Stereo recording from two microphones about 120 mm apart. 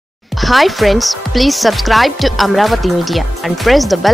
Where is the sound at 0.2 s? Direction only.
Centre (ahead or behind).